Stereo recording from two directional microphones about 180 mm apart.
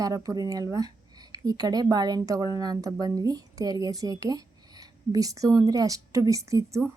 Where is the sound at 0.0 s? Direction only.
20° right (ahead or behind).